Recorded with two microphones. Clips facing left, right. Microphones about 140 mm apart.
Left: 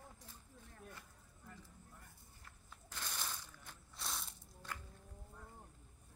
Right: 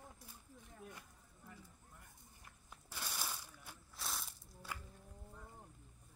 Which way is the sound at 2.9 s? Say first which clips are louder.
Right 1 dB; 10° right (ahead or behind).